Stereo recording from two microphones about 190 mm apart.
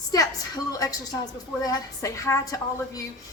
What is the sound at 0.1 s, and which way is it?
A woman's voice, 20° left (ahead or behind).